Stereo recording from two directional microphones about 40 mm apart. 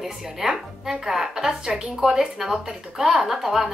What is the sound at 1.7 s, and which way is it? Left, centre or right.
Speech, right.